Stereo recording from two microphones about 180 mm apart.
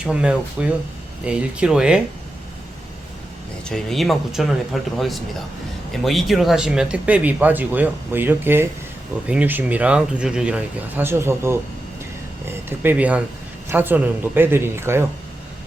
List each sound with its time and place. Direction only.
0.0 s speech: 5° right (ahead or behind)
3.7 s speech: centre (ahead or behind)